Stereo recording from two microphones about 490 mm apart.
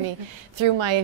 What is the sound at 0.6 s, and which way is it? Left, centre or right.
Speech, right.